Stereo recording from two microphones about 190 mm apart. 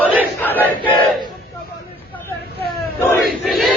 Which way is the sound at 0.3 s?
10° left (ahead or behind).